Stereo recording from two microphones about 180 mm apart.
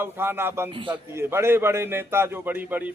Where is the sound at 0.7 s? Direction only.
30° right (ahead or behind).